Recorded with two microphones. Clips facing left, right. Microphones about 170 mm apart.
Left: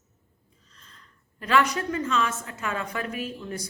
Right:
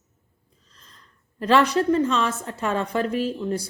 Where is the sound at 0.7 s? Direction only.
35° right (ahead or behind).